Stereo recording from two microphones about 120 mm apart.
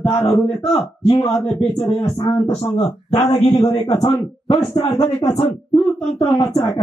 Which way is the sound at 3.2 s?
60° left (ahead or behind).